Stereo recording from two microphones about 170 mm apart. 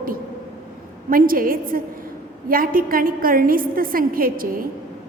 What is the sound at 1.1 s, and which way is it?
A woman's voice, 55° right (ahead or behind).